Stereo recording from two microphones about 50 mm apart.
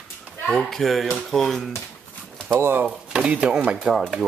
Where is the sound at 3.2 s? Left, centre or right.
Right.